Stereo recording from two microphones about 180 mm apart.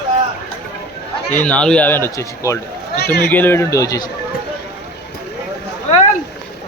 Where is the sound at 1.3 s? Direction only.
10° left (ahead or behind).